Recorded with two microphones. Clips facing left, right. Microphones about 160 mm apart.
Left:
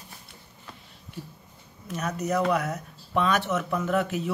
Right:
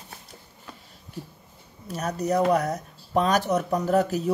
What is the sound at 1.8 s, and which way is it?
Speech, 35° right (ahead or behind).